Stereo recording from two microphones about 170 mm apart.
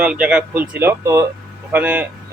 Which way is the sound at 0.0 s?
5° right (ahead or behind).